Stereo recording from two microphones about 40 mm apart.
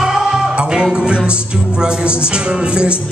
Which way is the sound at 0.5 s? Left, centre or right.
Right.